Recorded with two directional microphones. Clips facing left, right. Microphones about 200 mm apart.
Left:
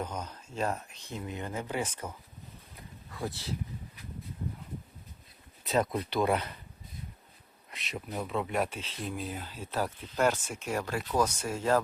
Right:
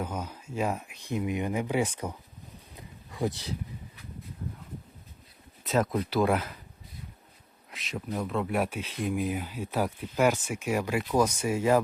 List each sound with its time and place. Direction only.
0.0 s speech: 10° right (ahead or behind)
2.7 s a sound: 20° right (ahead or behind)
5.6 s speech: centre (ahead or behind)
7.7 s speech: centre (ahead or behind)